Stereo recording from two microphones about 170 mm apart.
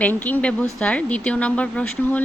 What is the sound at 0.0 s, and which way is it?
Speech, 10° left (ahead or behind).